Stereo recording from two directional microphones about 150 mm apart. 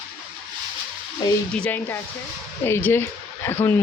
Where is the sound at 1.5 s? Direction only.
10° left (ahead or behind).